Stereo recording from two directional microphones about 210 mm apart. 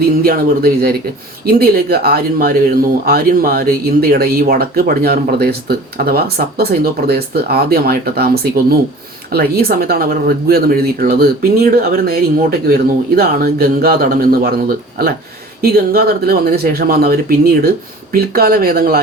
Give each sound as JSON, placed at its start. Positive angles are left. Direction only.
{"t": 0.2, "sound": "speech", "side_deg": -45}